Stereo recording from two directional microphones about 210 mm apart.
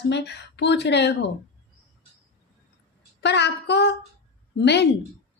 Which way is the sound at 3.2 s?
55° left (ahead or behind).